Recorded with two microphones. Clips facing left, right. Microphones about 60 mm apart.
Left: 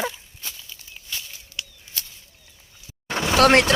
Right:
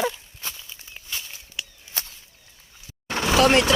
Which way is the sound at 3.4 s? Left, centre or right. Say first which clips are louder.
Left 3 dB; left.